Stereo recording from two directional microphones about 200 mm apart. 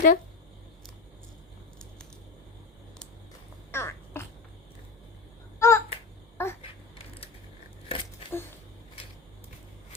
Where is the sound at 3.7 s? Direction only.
10° left (ahead or behind).